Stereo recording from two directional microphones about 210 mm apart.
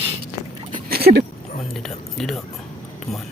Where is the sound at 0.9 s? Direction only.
50° right (ahead or behind).